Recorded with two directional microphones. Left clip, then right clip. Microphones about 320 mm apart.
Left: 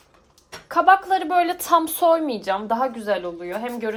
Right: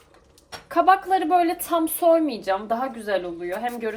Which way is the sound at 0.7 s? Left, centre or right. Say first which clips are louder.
Left 2 dB; centre.